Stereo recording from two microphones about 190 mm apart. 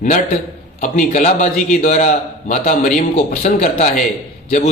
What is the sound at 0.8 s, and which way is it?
A man's voice, 40° left (ahead or behind).